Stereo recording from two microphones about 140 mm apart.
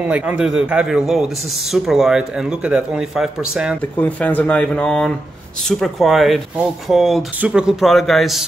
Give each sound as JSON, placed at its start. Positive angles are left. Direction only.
{"t": 0.0, "sound": "a man's voice", "side_deg": -10}
{"t": 4.0, "sound": "a man's voice", "side_deg": 10}